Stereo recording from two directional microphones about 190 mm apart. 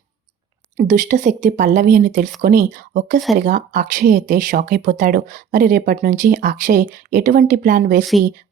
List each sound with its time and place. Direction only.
0.8 s a woman's voice: 45° right (ahead or behind)